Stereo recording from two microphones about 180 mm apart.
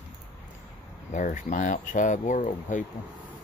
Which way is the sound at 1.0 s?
45° left (ahead or behind).